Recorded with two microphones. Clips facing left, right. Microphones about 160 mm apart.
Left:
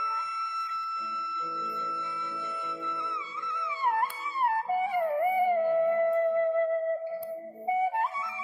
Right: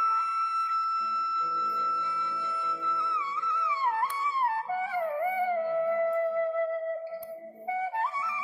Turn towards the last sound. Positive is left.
turn(degrees=20)  # may be behind; listen again after turning